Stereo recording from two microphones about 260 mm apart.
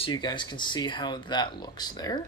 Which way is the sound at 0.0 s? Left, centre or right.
Centre.